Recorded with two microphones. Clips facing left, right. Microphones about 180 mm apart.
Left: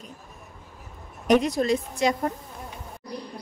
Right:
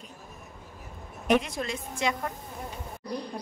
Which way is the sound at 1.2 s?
40° left (ahead or behind).